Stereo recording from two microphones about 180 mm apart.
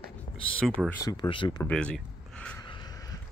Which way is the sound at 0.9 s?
20° left (ahead or behind).